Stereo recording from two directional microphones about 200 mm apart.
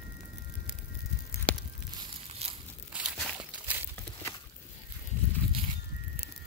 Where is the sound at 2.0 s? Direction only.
30° right (ahead or behind).